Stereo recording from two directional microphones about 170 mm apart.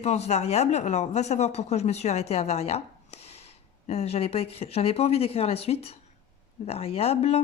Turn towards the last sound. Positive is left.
turn(degrees=35)  # may be behind; listen again after turning